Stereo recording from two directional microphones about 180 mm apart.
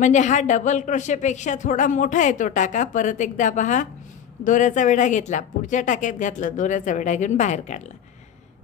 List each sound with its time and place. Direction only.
0.0 s speech: 40° left (ahead or behind)